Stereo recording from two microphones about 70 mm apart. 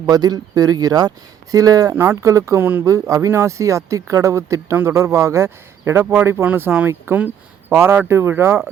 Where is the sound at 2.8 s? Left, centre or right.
Right.